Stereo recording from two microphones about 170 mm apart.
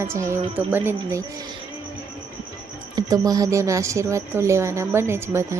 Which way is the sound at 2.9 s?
20° right (ahead or behind).